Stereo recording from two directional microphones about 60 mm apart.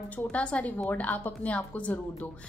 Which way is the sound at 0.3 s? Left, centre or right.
Left.